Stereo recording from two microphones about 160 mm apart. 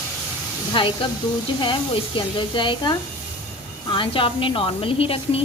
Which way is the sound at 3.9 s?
35° left (ahead or behind).